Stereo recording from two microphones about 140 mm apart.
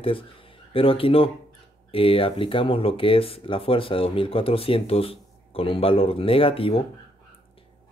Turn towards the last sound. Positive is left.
turn(degrees=40)  # may be behind; listen again after turning